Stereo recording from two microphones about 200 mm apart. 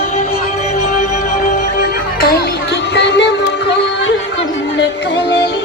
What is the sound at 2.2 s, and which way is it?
Music, 50° left (ahead or behind).